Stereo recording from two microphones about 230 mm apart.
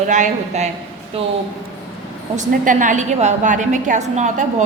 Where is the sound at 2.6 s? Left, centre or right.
Right.